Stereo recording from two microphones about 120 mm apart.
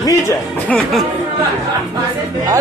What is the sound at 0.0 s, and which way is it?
Speech, 25° left (ahead or behind).